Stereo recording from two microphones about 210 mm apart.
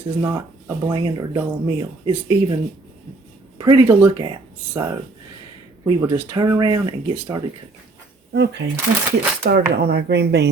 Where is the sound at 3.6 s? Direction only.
15° right (ahead or behind).